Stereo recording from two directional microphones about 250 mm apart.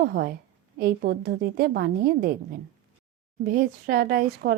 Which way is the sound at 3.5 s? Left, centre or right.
Right.